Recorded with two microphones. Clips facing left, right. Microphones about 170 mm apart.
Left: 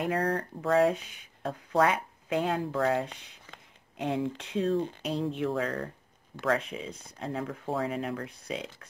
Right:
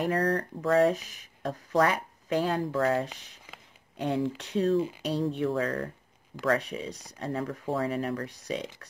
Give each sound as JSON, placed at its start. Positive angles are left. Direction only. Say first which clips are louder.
{"t": 0.3, "sound": "speech", "louder": "right 1 dB", "side_deg": -35}
{"t": 6.9, "sound": "speech", "louder": "right 2 dB", "side_deg": -75}
{"t": 7.2, "sound": "speech", "louder": "right 2 dB", "side_deg": -35}